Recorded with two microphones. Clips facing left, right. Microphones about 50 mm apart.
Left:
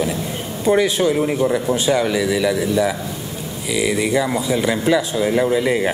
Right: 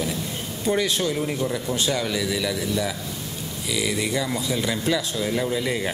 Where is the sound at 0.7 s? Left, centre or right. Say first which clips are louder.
Left 7 dB; centre.